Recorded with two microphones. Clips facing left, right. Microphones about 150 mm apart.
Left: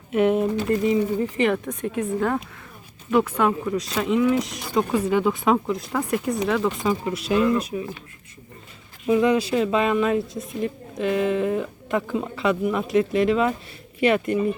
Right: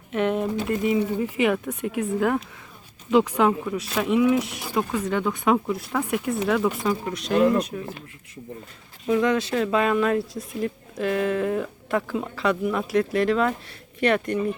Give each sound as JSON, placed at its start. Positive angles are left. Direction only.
{"t": 0.1, "sound": "speech", "side_deg": 5}
{"t": 3.7, "sound": "speech", "side_deg": -5}
{"t": 4.9, "sound": "speech", "side_deg": 10}
{"t": 9.0, "sound": "speech", "side_deg": 10}